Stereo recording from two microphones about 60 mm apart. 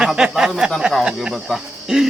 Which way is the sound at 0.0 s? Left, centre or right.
Centre.